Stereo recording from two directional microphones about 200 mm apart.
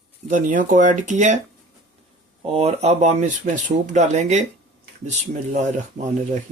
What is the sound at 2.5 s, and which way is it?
Speech, 30° right (ahead or behind).